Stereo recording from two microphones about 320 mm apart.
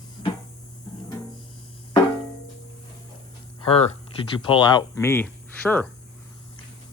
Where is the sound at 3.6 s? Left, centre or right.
Centre.